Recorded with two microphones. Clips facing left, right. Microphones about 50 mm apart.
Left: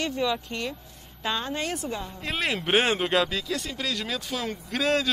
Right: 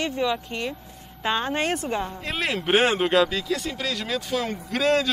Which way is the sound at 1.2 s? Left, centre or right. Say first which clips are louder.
Right 5 dB; right.